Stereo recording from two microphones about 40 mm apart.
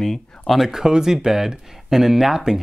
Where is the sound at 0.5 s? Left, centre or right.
Centre.